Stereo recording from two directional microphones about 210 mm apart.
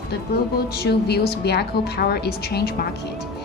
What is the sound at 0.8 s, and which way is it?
A woman's voice, 50° left (ahead or behind).